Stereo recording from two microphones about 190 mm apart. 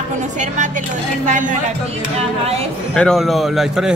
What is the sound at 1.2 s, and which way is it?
Speech, 40° right (ahead or behind).